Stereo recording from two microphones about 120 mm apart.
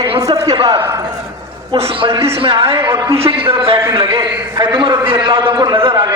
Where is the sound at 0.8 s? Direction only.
25° right (ahead or behind).